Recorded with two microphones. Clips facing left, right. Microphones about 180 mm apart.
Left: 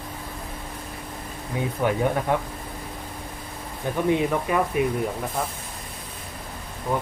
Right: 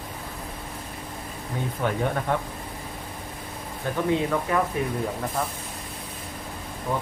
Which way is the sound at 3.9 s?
15° left (ahead or behind).